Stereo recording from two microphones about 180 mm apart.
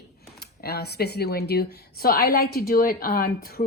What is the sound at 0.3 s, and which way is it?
Speech, 60° left (ahead or behind).